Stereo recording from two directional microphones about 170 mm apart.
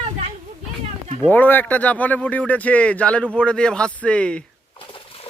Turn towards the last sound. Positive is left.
turn(degrees=30)  # may be behind; listen again after turning